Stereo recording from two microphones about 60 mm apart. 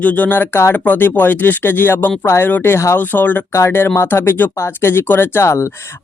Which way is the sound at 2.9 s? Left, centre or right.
Left.